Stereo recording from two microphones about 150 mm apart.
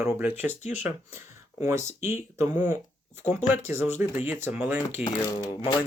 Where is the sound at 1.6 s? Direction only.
20° right (ahead or behind).